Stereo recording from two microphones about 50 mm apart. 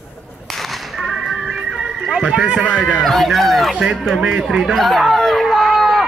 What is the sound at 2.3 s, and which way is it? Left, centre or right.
Speech, centre.